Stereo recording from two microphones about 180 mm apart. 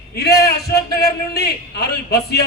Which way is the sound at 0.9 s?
60° left (ahead or behind).